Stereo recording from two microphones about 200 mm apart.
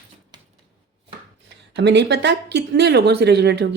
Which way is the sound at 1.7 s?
60° right (ahead or behind).